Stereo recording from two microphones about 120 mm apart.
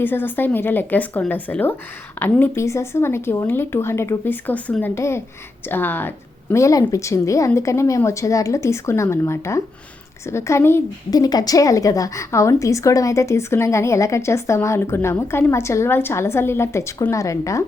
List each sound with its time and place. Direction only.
0.0 s a woman's voice: 15° left (ahead or behind)
4.9 s a woman's voice: 20° left (ahead or behind)
11.1 s a woman's voice: 30° left (ahead or behind)